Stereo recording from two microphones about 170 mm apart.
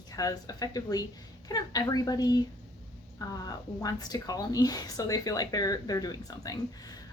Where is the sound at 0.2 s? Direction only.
20° left (ahead or behind).